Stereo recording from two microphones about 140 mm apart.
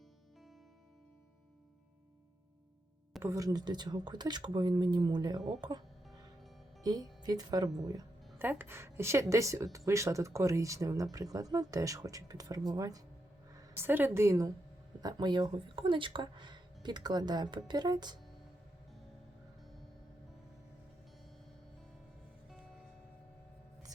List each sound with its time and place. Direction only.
3.2 s speech: 25° right (ahead or behind)
6.8 s speech: 25° right (ahead or behind)
8.4 s a woman's voice: 15° right (ahead or behind)
13.7 s a woman's voice: 15° right (ahead or behind)